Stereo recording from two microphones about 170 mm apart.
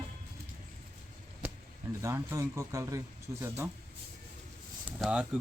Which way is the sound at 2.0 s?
15° right (ahead or behind).